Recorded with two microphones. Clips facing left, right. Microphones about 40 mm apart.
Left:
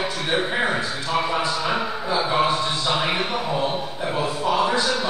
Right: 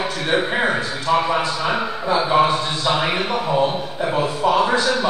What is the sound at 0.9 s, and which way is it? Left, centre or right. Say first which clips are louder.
A man's voice: right 4 dB; centre.